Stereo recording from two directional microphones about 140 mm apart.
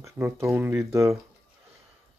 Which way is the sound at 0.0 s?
20° right (ahead or behind).